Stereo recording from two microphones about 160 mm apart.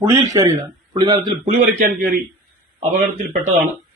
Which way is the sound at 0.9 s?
30° right (ahead or behind).